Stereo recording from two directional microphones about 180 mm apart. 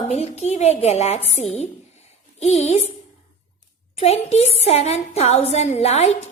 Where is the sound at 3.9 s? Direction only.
35° left (ahead or behind).